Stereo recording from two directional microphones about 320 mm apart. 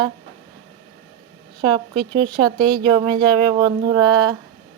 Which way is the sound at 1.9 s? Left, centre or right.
Centre.